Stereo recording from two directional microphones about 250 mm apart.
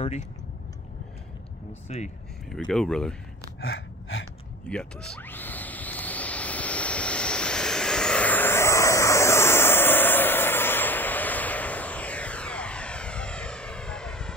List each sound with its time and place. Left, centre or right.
0.0 s speech: left
1.9 s speech: left
2.5 s speech: centre
3.6 s gasp: left
4.6 s a sound: centre